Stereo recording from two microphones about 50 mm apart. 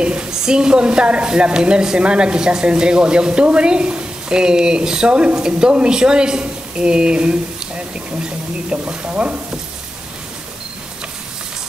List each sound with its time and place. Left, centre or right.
0.0 s speech: centre